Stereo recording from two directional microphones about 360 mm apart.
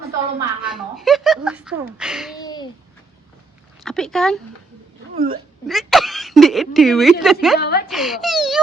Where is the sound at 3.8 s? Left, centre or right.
Centre.